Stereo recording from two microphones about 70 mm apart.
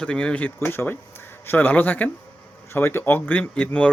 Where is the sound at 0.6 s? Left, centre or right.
Left.